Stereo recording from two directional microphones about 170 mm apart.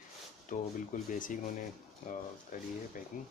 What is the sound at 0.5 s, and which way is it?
Speech, 50° left (ahead or behind).